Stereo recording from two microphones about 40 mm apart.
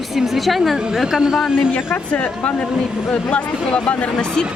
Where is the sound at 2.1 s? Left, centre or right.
Left.